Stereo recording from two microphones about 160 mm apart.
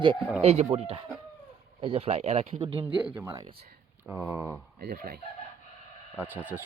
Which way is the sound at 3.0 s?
15° right (ahead or behind).